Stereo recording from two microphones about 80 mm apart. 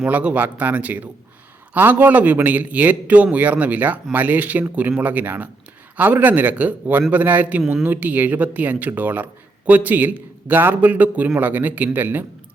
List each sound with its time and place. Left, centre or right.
0.0 s speech: centre